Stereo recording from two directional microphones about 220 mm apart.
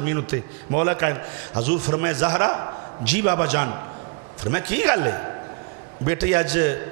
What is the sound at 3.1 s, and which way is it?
A man's voice, 10° right (ahead or behind).